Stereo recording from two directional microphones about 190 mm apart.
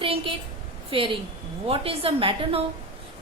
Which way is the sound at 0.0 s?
25° right (ahead or behind).